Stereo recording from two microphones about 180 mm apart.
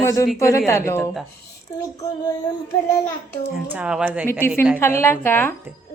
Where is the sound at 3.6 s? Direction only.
10° right (ahead or behind).